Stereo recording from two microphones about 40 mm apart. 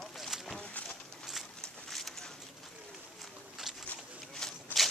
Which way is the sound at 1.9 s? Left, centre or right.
Centre.